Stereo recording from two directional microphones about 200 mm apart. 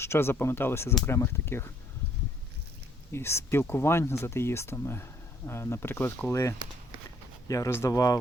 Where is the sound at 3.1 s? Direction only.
15° left (ahead or behind).